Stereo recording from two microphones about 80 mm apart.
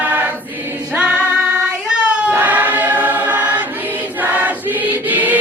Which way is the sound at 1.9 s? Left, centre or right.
Centre.